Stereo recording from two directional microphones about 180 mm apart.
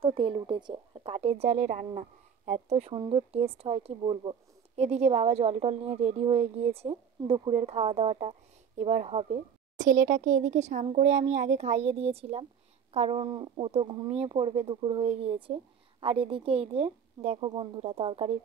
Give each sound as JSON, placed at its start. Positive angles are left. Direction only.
{"t": 0.0, "sound": "speech", "side_deg": -30}